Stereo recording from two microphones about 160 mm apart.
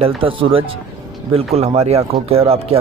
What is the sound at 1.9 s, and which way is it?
Speech, 40° right (ahead or behind).